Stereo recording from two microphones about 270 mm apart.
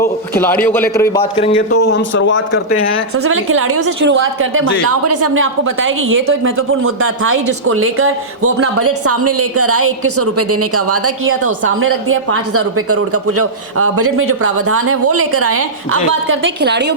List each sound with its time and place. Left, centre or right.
0.0 s a man's voice: centre
1.7 s a man's voice: left
3.2 s a woman's voice: right
4.9 s a woman's voice: right